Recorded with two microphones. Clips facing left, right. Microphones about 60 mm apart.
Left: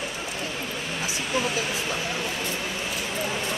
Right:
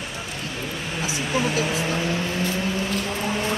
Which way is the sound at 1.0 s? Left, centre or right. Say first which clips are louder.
Right 3 dB; centre.